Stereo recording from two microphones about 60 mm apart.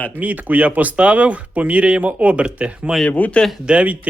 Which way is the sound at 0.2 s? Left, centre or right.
Right.